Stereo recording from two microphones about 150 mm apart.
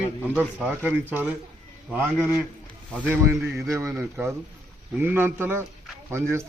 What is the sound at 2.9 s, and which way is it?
Speech, 5° left (ahead or behind).